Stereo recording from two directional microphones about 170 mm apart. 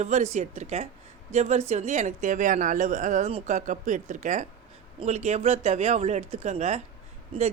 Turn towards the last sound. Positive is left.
turn(degrees=-30)  # may be behind; listen again after turning